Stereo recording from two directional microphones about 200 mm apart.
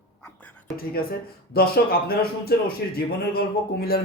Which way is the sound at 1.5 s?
50° left (ahead or behind).